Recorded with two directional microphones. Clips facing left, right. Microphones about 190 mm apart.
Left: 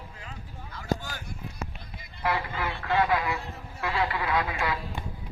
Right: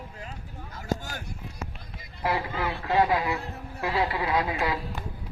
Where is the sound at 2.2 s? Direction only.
35° right (ahead or behind).